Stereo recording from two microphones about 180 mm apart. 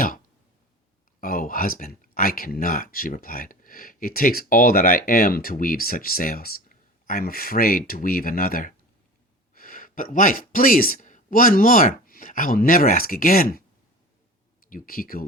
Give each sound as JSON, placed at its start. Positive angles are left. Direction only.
{"t": 1.2, "sound": "speech", "side_deg": 50}
{"t": 14.7, "sound": "speech", "side_deg": 50}